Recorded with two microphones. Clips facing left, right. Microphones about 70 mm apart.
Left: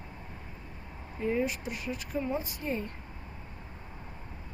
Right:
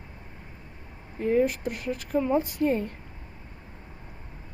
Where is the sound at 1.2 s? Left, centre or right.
Right.